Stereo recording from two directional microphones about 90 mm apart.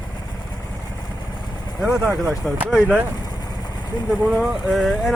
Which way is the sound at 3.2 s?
50° left (ahead or behind).